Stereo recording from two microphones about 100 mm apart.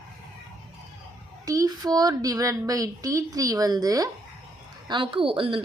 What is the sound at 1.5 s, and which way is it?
Speech, 40° right (ahead or behind).